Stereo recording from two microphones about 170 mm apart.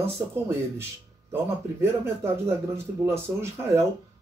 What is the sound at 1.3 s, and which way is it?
Speech, 15° right (ahead or behind).